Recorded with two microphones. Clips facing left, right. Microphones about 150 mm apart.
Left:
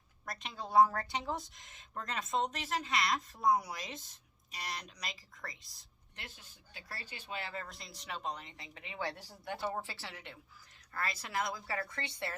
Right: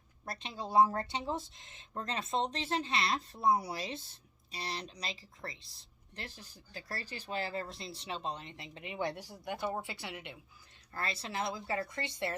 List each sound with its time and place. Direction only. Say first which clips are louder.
0.3 s a woman's voice: right 2 dB; 30° right (ahead or behind)
10.9 s a woman's voice: even; 30° right (ahead or behind)